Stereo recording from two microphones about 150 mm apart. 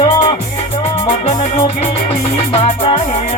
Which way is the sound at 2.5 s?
40° left (ahead or behind).